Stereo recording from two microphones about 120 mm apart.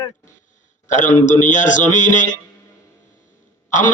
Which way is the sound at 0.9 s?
90° left.